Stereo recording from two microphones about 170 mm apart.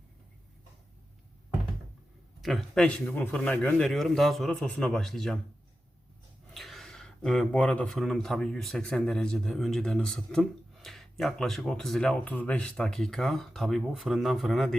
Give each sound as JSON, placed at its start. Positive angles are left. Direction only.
{"t": 2.4, "sound": "speech", "side_deg": 0}
{"t": 6.5, "sound": "speech", "side_deg": 0}